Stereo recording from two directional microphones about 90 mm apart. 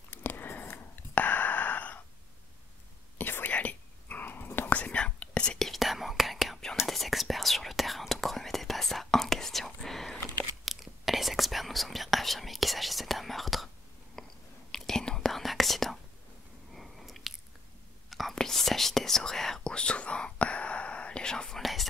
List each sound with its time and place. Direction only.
0.1 s a sound: 20° left (ahead or behind)
3.2 s whispering: 20° left (ahead or behind); by 13.7 s centre (ahead or behind)
14.2 s chewing: 5° left (ahead or behind)
14.7 s whispering: 5° left (ahead or behind)
16.7 s chewing: centre (ahead or behind)
18.1 s whispering: 5° left (ahead or behind)